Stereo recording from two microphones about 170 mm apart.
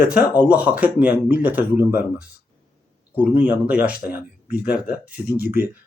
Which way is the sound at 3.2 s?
10° right (ahead or behind).